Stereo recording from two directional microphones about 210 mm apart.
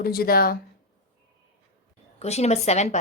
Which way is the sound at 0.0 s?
45° left (ahead or behind).